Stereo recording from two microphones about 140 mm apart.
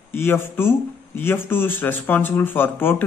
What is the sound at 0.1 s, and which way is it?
Speech, 15° left (ahead or behind).